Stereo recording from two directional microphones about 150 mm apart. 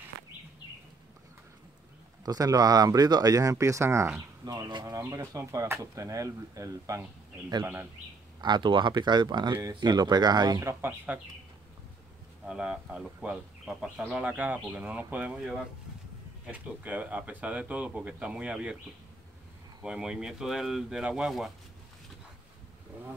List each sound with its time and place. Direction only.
2.2 s speech: 25° right (ahead or behind)
12.4 s speech: 5° right (ahead or behind)
19.8 s speech: 5° right (ahead or behind)